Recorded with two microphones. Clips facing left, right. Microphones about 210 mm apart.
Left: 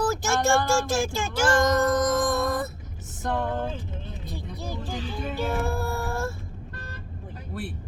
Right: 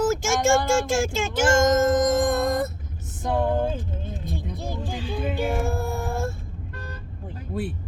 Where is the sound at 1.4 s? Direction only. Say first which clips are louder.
Right 3 dB; 20° right (ahead or behind).